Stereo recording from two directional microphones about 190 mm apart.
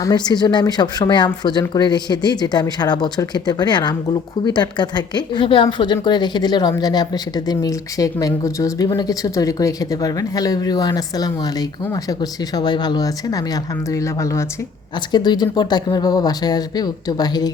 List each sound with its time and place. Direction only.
0.3 s speech: 20° left (ahead or behind)